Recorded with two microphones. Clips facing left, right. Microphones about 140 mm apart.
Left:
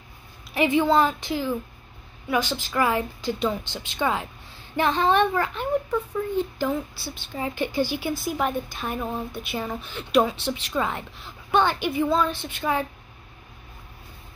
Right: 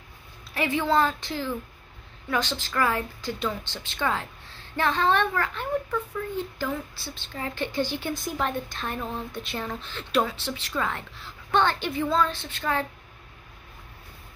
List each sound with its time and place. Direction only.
0.6 s speech: 15° left (ahead or behind)